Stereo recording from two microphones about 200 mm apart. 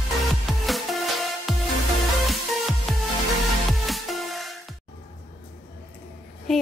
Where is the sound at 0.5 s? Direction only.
Centre (ahead or behind).